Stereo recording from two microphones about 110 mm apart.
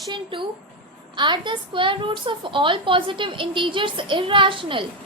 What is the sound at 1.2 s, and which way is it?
A woman's voice, 45° right (ahead or behind).